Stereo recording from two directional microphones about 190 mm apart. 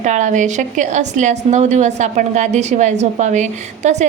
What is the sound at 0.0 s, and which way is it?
A woman's voice, 40° right (ahead or behind).